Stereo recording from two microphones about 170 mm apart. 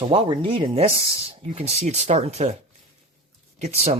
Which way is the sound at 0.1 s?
35° right (ahead or behind).